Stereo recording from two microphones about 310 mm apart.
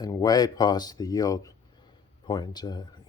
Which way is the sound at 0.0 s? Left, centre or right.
Centre.